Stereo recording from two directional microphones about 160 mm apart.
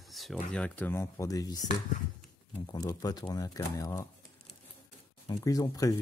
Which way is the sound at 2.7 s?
25° left (ahead or behind).